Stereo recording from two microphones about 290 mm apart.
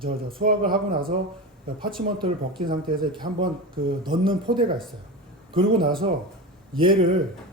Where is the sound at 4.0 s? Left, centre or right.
Centre.